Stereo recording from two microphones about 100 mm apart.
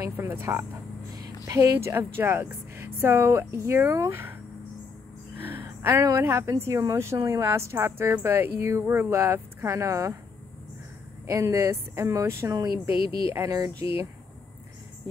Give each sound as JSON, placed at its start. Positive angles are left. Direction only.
{"t": 0.3, "sound": "speech", "side_deg": -25}
{"t": 1.1, "sound": "speech", "side_deg": -35}
{"t": 5.4, "sound": "a sound", "side_deg": -20}
{"t": 6.5, "sound": "speech", "side_deg": -25}
{"t": 11.2, "sound": "speech", "side_deg": -30}